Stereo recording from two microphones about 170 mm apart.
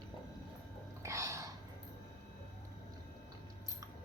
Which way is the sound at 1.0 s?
15° right (ahead or behind).